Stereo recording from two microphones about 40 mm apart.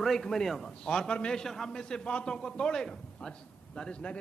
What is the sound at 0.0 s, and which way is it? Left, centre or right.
A man's voice, centre.